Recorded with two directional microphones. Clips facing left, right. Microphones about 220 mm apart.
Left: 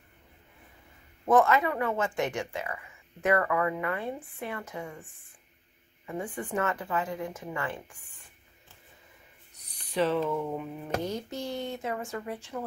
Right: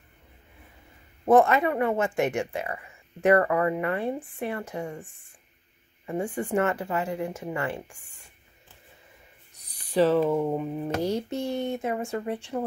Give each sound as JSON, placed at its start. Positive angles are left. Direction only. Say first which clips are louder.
{"t": 1.2, "sound": "speech", "louder": "right 4 dB", "side_deg": -30}
{"t": 6.0, "sound": "speech", "louder": "right 6 dB", "side_deg": -30}
{"t": 9.8, "sound": "speech", "louder": "right 6 dB", "side_deg": -40}